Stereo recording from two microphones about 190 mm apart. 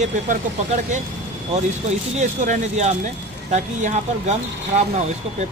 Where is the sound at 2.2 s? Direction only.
40° right (ahead or behind).